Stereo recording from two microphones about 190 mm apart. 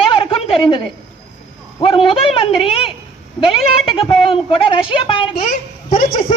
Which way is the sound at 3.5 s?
30° left (ahead or behind).